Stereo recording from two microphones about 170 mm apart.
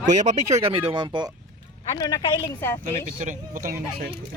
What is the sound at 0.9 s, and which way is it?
Speech, 25° right (ahead or behind).